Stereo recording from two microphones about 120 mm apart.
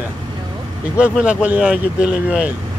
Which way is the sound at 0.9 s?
10° right (ahead or behind).